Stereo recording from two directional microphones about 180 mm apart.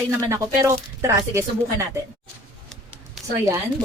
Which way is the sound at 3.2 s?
Centre (ahead or behind).